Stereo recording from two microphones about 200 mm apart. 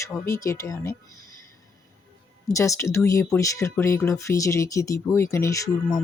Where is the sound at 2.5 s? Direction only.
15° left (ahead or behind).